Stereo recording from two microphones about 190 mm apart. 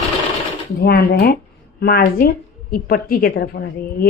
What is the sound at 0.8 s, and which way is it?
A woman's voice, 55° left (ahead or behind).